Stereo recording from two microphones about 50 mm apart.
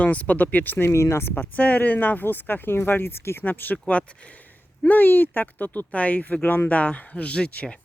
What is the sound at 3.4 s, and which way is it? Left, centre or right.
Speech, left.